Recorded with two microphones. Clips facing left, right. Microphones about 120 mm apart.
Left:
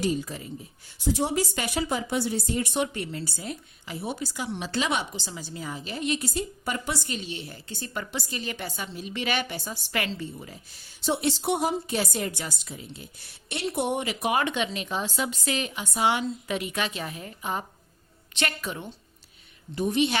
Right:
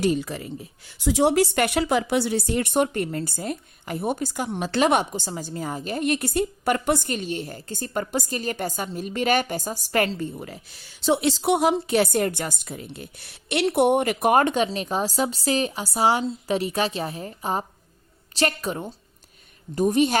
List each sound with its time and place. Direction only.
0.0 s a woman's voice: 70° right (ahead or behind); by 20.1 s 40° right (ahead or behind)